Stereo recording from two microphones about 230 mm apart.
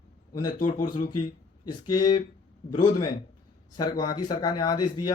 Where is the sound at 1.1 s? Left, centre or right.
Left.